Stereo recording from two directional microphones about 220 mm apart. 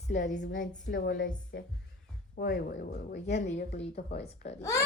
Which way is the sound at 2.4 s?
45° left (ahead or behind).